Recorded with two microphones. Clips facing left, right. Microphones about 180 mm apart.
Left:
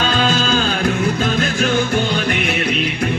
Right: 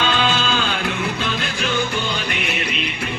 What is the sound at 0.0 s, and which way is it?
Music, 40° left (ahead or behind).